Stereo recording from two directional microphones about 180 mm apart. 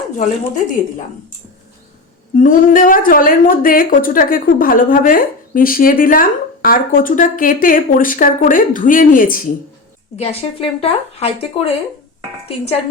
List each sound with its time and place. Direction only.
2.3 s a woman's voice: 45° left (ahead or behind)
10.2 s speech: 30° left (ahead or behind)